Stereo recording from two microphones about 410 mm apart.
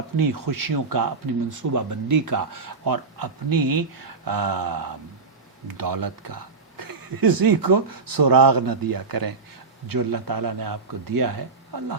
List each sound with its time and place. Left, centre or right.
0.2 s a man's voice: right